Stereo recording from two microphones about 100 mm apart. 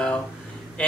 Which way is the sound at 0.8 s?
10° left (ahead or behind).